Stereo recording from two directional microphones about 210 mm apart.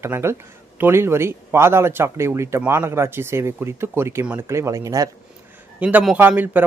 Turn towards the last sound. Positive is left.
turn(degrees=-10)  # may be behind; listen again after turning